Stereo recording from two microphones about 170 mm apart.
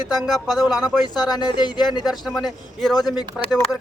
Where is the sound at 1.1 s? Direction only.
25° left (ahead or behind).